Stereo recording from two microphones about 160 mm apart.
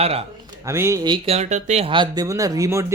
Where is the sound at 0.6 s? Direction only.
15° right (ahead or behind); by 1.9 s 45° right (ahead or behind).